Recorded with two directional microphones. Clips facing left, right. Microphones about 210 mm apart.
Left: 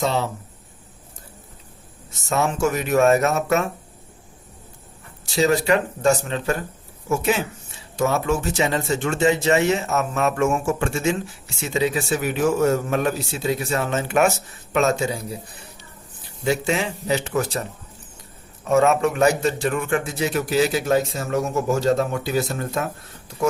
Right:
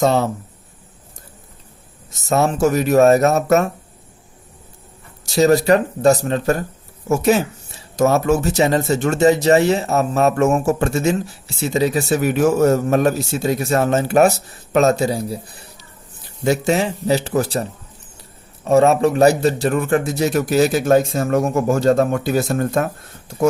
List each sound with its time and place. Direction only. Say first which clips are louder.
0.0 s a man's voice: right 6 dB; 45° right (ahead or behind)
2.3 s speech: right 5 dB; 40° right (ahead or behind)
5.2 s speech: right 5 dB; 40° right (ahead or behind)
16.4 s a man's voice: right 5 dB; 40° right (ahead or behind)